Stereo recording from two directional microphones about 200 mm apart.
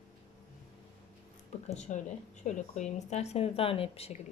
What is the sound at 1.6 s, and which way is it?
A woman's voice, 35° left (ahead or behind).